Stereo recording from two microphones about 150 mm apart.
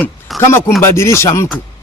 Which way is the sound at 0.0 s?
15° left (ahead or behind).